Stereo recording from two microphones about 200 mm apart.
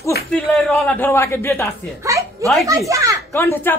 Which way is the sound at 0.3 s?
Centre (ahead or behind).